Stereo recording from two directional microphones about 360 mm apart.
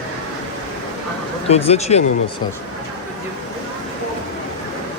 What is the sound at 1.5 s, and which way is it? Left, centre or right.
Speech, centre.